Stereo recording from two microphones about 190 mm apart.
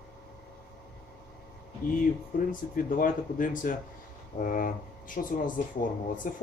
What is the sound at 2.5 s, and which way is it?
Speech, 45° left (ahead or behind).